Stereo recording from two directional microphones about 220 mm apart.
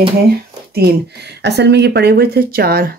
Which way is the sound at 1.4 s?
50° right (ahead or behind).